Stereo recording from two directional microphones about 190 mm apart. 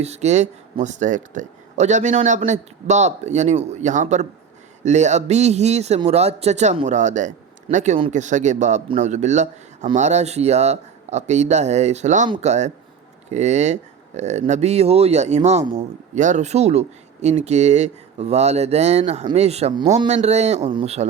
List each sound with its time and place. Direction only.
0.0 s speech: 35° right (ahead or behind)